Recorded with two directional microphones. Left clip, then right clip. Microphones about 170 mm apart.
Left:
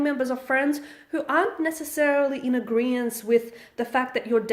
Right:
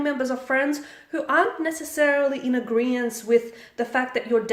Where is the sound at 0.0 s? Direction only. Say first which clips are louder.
Even; 35° left (ahead or behind).